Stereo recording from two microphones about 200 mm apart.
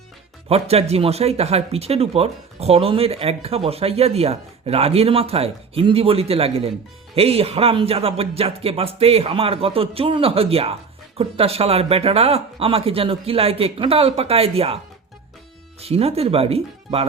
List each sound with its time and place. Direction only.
0.4 s speech: 30° right (ahead or behind)
15.8 s speech: 30° right (ahead or behind)